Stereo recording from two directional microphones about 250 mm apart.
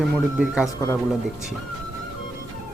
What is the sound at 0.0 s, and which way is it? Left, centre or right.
Speech, centre.